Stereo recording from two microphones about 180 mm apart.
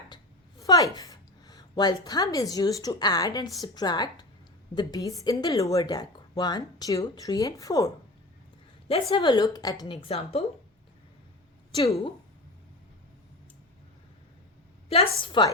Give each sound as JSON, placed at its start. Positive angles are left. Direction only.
{"t": 0.6, "sound": "a woman's voice", "side_deg": 20}
{"t": 8.9, "sound": "a woman's voice", "side_deg": 30}
{"t": 14.8, "sound": "a woman's voice", "side_deg": 30}